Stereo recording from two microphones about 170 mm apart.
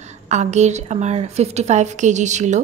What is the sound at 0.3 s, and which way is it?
A woman's voice, 40° right (ahead or behind).